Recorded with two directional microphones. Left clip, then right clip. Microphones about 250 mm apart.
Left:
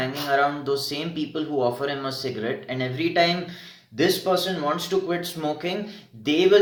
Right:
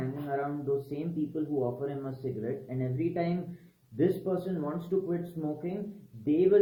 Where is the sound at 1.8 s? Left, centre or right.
Centre.